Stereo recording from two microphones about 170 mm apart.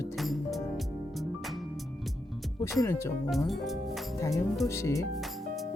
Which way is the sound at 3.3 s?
Centre (ahead or behind).